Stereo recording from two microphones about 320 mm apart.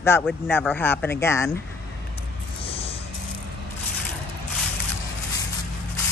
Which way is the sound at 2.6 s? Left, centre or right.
Centre.